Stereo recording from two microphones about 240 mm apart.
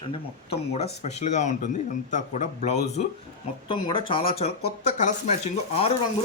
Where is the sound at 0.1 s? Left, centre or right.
Left.